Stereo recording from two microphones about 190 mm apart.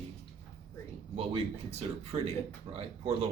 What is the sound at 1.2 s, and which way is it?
Speech, 30° right (ahead or behind).